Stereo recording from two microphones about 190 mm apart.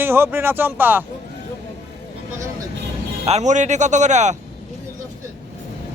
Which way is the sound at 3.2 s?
35° right (ahead or behind).